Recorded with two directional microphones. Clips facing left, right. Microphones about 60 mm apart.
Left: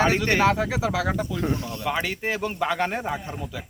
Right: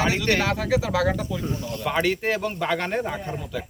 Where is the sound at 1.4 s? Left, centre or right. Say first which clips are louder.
Left 3 dB; left.